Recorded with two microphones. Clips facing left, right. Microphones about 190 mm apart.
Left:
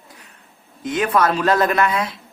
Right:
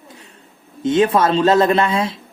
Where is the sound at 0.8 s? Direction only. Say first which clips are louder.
Right 4 dB; 25° right (ahead or behind).